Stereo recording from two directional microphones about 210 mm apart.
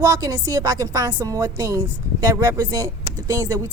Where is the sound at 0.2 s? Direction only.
15° right (ahead or behind).